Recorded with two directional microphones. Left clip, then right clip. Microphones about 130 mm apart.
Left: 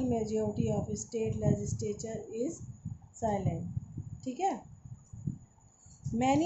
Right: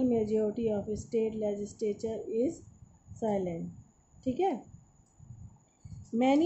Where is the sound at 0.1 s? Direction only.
35° right (ahead or behind).